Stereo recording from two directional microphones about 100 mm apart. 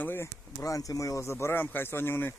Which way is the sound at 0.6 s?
35° left (ahead or behind).